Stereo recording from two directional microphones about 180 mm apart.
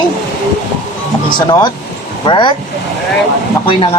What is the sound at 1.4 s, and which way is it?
Speech, 25° left (ahead or behind).